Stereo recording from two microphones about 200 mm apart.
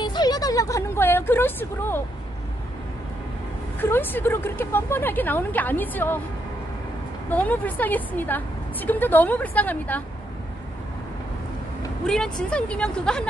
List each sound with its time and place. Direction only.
0.0 s a woman's voice: 20° left (ahead or behind)
3.8 s a woman's voice: 10° left (ahead or behind)
7.2 s a woman's voice: 10° left (ahead or behind)
12.1 s speech: 5° left (ahead or behind)